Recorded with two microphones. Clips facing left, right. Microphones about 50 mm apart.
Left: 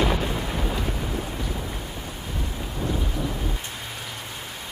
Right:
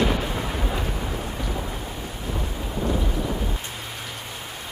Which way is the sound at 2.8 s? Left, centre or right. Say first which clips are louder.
Right 2 dB; centre.